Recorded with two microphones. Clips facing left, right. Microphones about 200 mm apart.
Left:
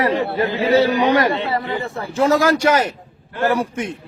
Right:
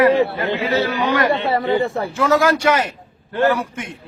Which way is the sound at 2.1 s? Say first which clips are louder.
Left 2 dB; 35° left (ahead or behind).